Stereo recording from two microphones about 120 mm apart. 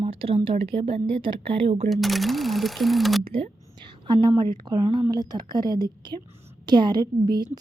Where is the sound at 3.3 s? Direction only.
45° right (ahead or behind).